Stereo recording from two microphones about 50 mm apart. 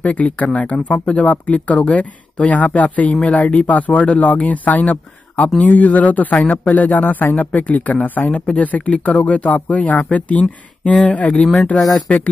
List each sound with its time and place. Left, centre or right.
0.0 s speech: left